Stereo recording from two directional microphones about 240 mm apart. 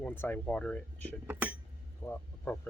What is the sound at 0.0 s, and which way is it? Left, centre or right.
Speech, centre.